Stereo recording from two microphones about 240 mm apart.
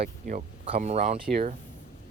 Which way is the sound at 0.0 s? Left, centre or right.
Right.